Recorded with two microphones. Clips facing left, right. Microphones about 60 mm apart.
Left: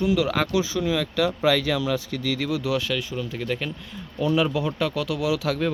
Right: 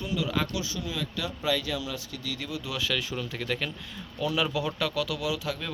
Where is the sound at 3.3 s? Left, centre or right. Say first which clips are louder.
Left 4 dB; centre.